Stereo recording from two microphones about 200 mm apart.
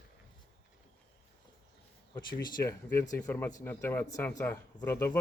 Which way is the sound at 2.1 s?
25° left (ahead or behind).